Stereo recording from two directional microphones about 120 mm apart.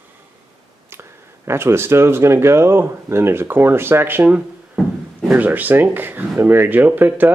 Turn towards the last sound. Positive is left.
turn(degrees=-15)  # may be behind; listen again after turning